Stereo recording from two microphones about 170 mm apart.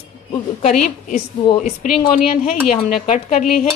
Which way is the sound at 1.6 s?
50° left (ahead or behind).